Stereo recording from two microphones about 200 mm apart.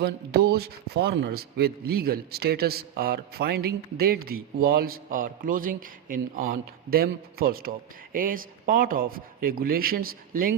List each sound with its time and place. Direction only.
0.0 s a man's voice: 50° right (ahead or behind)